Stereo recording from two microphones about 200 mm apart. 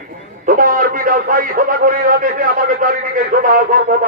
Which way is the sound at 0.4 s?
45° right (ahead or behind).